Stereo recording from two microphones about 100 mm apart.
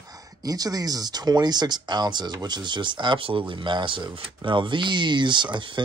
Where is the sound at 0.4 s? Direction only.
40° right (ahead or behind).